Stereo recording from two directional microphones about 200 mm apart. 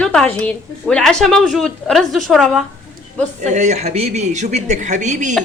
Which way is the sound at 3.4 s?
35° right (ahead or behind).